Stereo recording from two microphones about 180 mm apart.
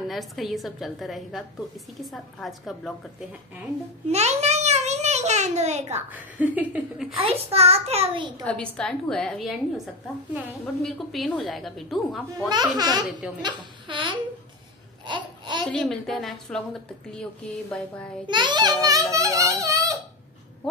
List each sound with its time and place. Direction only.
0.1 s a woman's voice: centre (ahead or behind)
4.1 s a sound: 40° right (ahead or behind)
6.1 s speech: 10° right (ahead or behind)
7.2 s a child's voice: 30° right (ahead or behind)
8.5 s a woman's voice: 5° left (ahead or behind)
12.4 s a child's voice: 20° right (ahead or behind)
15.0 s babbling: 25° right (ahead or behind)
15.7 s a woman's voice: 5° left (ahead or behind)
18.2 s a child's voice: 25° right (ahead or behind)
19.1 s a sound: 15° right (ahead or behind)